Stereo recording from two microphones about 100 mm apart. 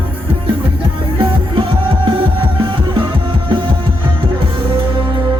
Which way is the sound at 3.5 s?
55° right (ahead or behind).